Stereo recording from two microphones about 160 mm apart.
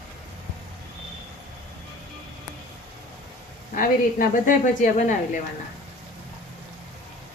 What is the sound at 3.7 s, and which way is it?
Speech, 55° left (ahead or behind).